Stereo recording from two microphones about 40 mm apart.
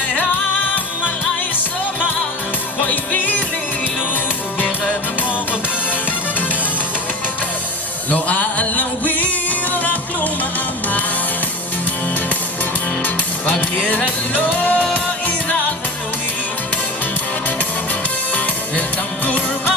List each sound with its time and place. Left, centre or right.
2.8 s music: left
8.1 s music: left
13.8 s music: left